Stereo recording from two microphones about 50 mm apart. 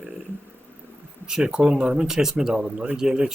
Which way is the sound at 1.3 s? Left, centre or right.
Centre.